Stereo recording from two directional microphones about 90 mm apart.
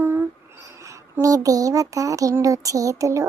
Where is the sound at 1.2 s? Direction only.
40° right (ahead or behind).